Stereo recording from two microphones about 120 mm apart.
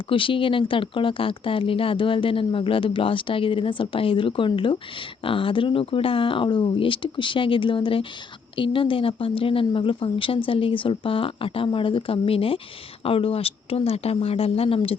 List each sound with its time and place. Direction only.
0.1 s speech: 45° left (ahead or behind)